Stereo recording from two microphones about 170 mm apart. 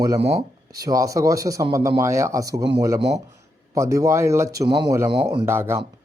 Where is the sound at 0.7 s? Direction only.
20° right (ahead or behind).